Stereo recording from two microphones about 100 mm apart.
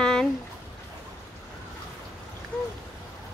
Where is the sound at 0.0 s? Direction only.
5° left (ahead or behind).